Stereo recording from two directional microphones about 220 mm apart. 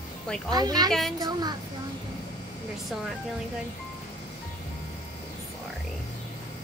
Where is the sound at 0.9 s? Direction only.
Centre (ahead or behind).